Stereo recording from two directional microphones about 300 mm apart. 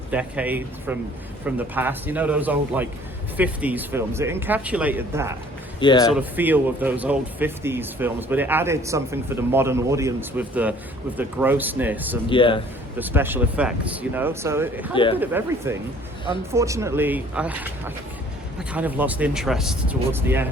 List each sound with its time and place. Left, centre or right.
0.1 s speech: centre
5.8 s speech: centre
6.1 s speech: centre
12.3 s speech: centre
13.0 s speech: centre
14.9 s speech: centre
15.2 s speech: centre